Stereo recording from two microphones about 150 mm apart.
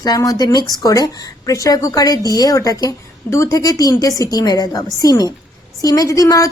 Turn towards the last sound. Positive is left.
turn(degrees=20)  # may be behind; listen again after turning